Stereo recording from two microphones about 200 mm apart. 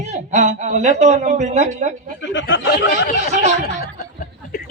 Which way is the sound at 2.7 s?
55° left (ahead or behind).